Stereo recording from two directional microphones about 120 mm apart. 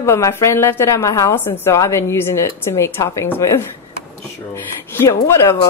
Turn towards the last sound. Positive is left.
turn(degrees=25)  # may be behind; listen again after turning